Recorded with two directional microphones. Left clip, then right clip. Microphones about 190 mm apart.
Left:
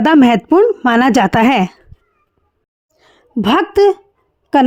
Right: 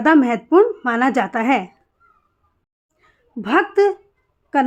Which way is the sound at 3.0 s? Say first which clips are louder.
Left 12 dB; 35° left (ahead or behind).